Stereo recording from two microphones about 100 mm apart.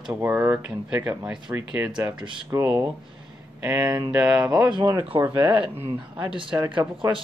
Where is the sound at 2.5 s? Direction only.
35° right (ahead or behind).